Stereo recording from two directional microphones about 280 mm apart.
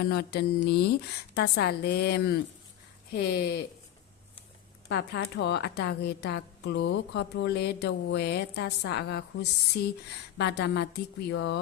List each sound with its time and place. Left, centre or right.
0.0 s a woman's voice: left
4.9 s a woman's voice: left